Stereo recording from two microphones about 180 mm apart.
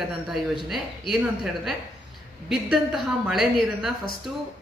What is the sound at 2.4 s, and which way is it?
A woman's voice, centre (ahead or behind).